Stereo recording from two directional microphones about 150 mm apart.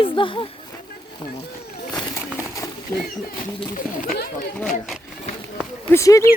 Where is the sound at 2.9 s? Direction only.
15° left (ahead or behind).